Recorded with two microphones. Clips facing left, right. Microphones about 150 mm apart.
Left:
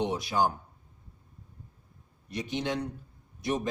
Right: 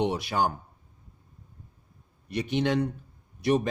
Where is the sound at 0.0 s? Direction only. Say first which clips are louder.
Right 2 dB; 65° right (ahead or behind).